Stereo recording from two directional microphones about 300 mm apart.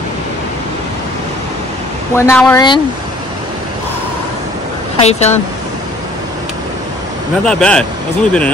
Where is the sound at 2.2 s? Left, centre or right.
Centre.